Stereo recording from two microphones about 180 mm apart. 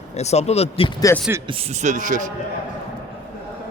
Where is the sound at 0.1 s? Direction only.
40° left (ahead or behind).